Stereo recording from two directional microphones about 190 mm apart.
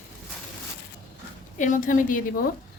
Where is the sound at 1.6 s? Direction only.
45° left (ahead or behind).